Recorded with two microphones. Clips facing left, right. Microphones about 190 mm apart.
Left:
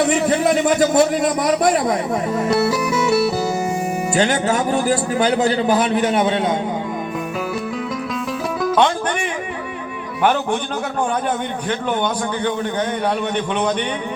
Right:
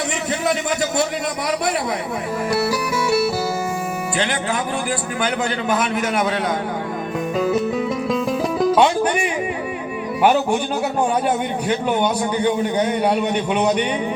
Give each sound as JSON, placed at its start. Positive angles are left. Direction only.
{"t": 0.1, "sound": "a man's voice", "side_deg": 50}
{"t": 4.2, "sound": "speech", "side_deg": 40}
{"t": 10.2, "sound": "a man's voice", "side_deg": -10}
{"t": 13.3, "sound": "a man's voice", "side_deg": -10}